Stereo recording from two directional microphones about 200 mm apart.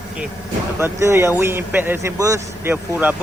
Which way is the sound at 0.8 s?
15° right (ahead or behind).